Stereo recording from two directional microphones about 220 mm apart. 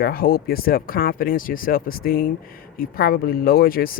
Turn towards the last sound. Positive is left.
turn(degrees=40)  # may be behind; listen again after turning